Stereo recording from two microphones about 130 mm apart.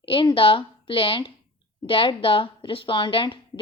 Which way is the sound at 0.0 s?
40° left (ahead or behind).